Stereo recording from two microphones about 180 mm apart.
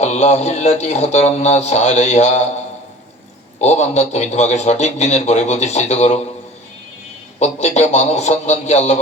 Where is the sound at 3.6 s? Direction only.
40° left (ahead or behind).